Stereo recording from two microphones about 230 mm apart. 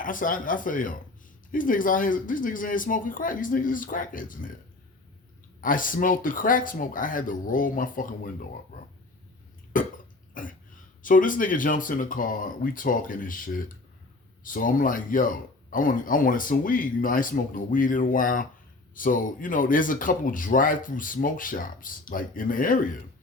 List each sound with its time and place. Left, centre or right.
0.0 s speech: left
5.5 s speech: left
9.7 s cough: left
10.4 s speech: left